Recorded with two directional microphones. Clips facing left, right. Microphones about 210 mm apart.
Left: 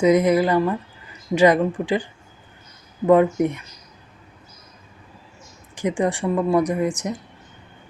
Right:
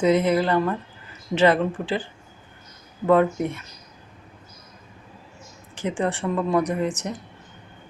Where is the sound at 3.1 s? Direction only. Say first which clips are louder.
Left 3 dB; 15° left (ahead or behind).